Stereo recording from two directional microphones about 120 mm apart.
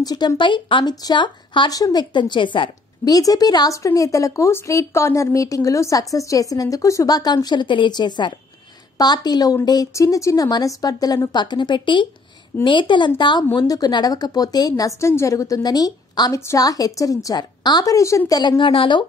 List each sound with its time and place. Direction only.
0.0 s a woman's voice: 35° left (ahead or behind)
3.2 s a woman's voice: 30° left (ahead or behind)